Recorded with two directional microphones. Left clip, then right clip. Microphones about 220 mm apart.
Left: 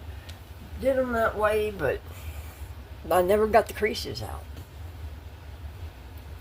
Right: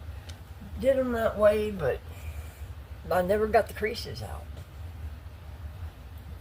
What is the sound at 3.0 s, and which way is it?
Speech, 40° left (ahead or behind).